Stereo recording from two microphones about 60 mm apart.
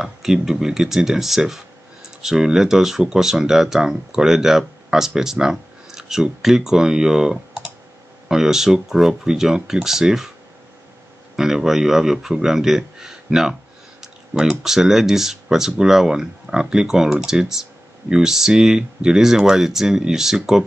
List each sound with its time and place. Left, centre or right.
0.0 s speech: centre
11.3 s speech: centre